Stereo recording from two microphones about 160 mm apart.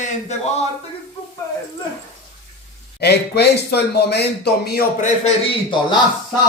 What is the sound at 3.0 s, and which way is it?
Speech, 90° left.